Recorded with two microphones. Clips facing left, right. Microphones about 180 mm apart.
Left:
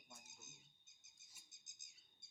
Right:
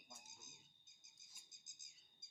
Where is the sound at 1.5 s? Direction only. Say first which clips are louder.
Right 1 dB; 70° left (ahead or behind).